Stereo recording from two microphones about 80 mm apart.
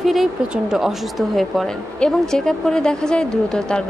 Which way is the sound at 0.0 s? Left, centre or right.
Centre.